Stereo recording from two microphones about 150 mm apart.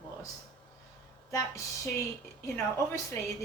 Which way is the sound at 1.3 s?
20° left (ahead or behind).